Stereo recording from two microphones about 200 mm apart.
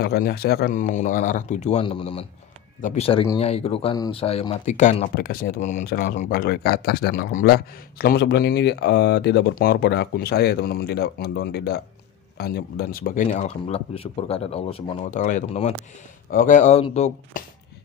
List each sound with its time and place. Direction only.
0.0 s speech: 50° left (ahead or behind)
5.1 s speech: 45° left (ahead or behind)